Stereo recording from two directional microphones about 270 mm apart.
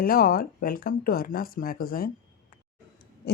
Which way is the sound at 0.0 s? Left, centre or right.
Left.